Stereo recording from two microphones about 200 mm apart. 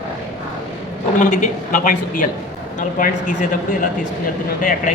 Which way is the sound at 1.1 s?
40° left (ahead or behind).